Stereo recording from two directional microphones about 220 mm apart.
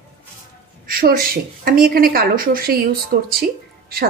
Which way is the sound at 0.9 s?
40° right (ahead or behind).